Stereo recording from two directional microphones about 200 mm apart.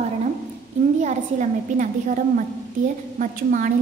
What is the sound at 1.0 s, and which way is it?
A woman's voice, 40° right (ahead or behind).